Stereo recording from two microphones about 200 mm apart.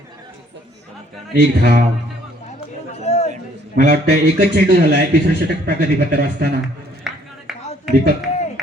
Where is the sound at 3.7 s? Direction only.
50° right (ahead or behind).